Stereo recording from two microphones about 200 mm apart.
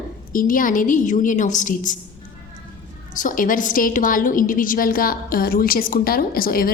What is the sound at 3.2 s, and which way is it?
A woman's voice, 40° left (ahead or behind).